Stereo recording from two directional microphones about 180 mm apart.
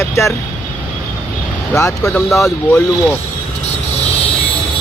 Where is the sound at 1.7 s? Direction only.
15° left (ahead or behind).